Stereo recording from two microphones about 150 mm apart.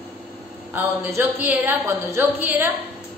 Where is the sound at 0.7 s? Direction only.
10° right (ahead or behind).